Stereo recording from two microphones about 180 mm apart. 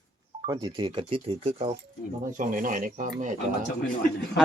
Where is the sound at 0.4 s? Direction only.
25° right (ahead or behind).